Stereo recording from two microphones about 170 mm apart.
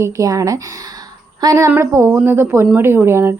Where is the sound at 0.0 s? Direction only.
20° right (ahead or behind).